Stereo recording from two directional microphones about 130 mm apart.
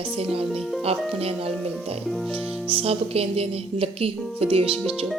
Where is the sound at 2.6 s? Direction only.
45° right (ahead or behind).